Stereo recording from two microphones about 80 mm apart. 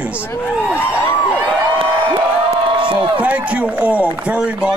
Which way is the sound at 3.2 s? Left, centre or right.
Centre.